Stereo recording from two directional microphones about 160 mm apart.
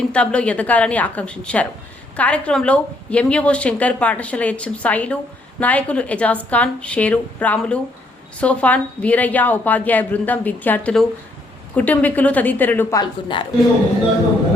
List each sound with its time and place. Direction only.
0.1 s a woman's voice: 5° left (ahead or behind)
13.0 s speech: 30° left (ahead or behind)